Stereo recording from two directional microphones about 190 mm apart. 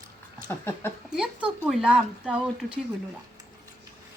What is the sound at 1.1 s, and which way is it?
Speech, 5° right (ahead or behind).